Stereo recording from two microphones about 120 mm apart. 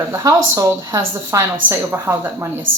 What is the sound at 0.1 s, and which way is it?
A woman's voice, 25° right (ahead or behind).